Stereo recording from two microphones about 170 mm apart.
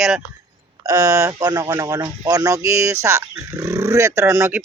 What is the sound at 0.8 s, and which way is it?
Speech, 20° right (ahead or behind).